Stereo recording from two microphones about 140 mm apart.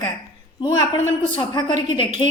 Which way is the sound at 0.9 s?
35° left (ahead or behind).